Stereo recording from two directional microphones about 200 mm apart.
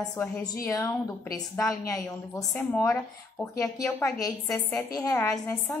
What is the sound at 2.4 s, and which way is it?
Speech, centre (ahead or behind).